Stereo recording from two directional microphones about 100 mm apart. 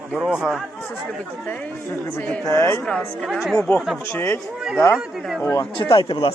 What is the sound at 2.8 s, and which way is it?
Speech, 5° left (ahead or behind).